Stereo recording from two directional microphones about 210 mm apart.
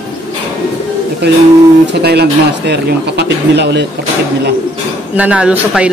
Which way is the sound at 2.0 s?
50° right (ahead or behind).